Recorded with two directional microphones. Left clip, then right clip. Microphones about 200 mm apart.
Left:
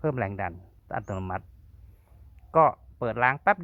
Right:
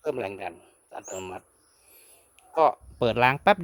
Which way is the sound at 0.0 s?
30° right (ahead or behind).